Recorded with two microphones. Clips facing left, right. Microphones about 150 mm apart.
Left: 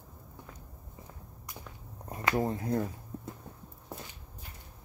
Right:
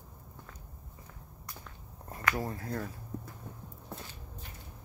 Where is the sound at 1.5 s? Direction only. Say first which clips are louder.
Left 2 dB; 15° left (ahead or behind).